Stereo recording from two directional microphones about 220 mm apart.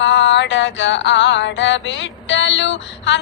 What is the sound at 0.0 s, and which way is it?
Music, 55° left (ahead or behind).